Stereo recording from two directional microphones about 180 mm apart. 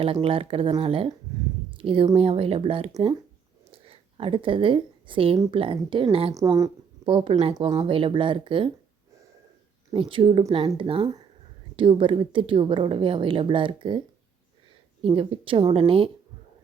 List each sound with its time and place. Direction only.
0.0 s a woman's voice: 30° right (ahead or behind)
6.3 s a woman's voice: 20° right (ahead or behind)
9.9 s a woman's voice: 30° right (ahead or behind)
15.0 s a woman's voice: 30° right (ahead or behind)